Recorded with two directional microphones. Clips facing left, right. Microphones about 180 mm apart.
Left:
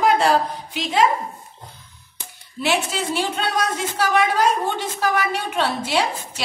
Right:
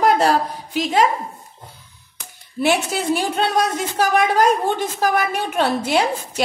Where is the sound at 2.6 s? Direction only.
45° right (ahead or behind).